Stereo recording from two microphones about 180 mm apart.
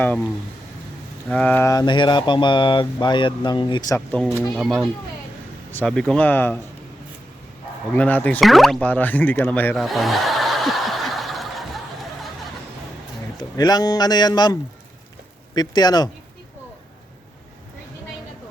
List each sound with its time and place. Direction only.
1.3 s speech: 5° left (ahead or behind)
4.5 s speech: centre (ahead or behind)
7.9 s speech: 10° left (ahead or behind)
9.8 s snicker: centre (ahead or behind)
13.6 s speech: 20° left (ahead or behind)